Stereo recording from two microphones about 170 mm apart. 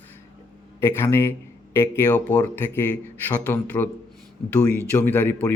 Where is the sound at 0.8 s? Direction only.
15° left (ahead or behind).